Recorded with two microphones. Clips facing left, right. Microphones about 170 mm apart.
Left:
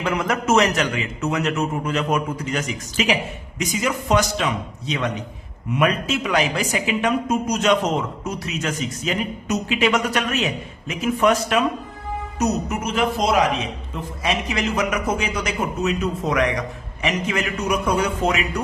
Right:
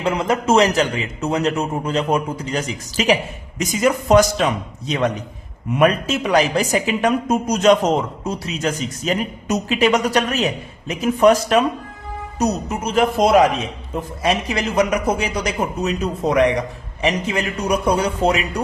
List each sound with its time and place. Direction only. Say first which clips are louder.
0.0 s speech: right 3 dB; 30° right (ahead or behind)